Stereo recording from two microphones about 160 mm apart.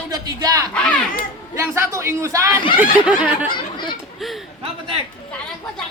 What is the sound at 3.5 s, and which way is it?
Chatter, 30° left (ahead or behind).